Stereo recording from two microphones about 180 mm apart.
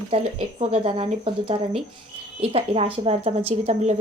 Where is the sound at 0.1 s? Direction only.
35° right (ahead or behind).